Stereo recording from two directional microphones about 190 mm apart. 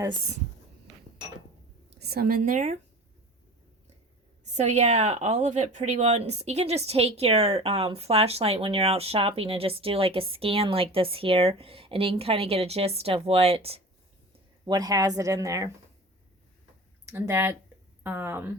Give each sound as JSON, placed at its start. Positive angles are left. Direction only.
{"t": 2.0, "sound": "speech", "side_deg": -55}
{"t": 4.5, "sound": "speech", "side_deg": -35}
{"t": 14.6, "sound": "speech", "side_deg": -20}
{"t": 17.1, "sound": "speech", "side_deg": -15}